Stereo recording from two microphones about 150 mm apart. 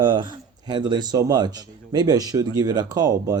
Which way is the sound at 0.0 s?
30° right (ahead or behind).